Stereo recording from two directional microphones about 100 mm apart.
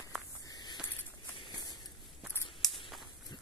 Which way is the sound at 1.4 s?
45° left (ahead or behind).